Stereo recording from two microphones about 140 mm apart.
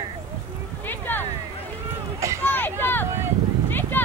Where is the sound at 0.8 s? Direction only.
15° left (ahead or behind).